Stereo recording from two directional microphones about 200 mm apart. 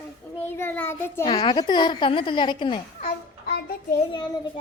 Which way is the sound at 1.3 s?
25° left (ahead or behind).